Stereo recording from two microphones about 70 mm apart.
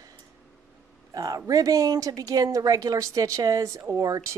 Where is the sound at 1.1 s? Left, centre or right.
Right.